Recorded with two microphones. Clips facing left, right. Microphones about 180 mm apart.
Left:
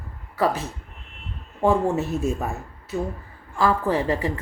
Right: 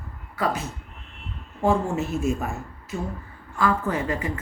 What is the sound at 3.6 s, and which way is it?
Speech, 35° left (ahead or behind).